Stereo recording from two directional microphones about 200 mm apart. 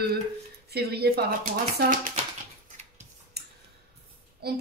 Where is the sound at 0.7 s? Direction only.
55° right (ahead or behind).